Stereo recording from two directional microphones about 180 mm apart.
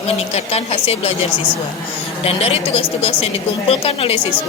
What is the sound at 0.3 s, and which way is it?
Speech, 35° left (ahead or behind).